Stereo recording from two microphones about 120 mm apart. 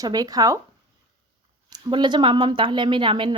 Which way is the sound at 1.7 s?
40° right (ahead or behind).